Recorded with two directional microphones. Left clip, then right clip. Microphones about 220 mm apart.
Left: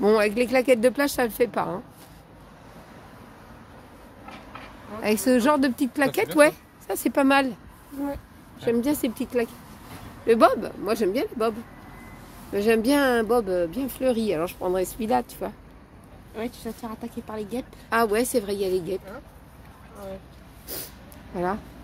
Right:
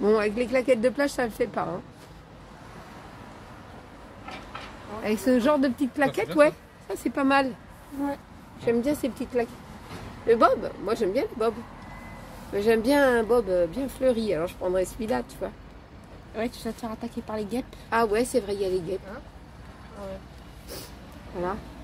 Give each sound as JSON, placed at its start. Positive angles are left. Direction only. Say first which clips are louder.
{"t": 0.0, "sound": "speech", "louder": "left 3 dB", "side_deg": 40}
{"t": 5.0, "sound": "speech", "louder": "left 2 dB", "side_deg": 50}
{"t": 8.5, "sound": "speech", "louder": "left 1 dB", "side_deg": 25}
{"t": 8.9, "sound": "speech", "louder": "left 1 dB", "side_deg": 35}
{"t": 12.5, "sound": "speech", "louder": "even", "side_deg": 30}
{"t": 16.3, "sound": "speech", "louder": "right 2 dB", "side_deg": -5}
{"t": 17.8, "sound": "speech", "louder": "left 2 dB", "side_deg": 30}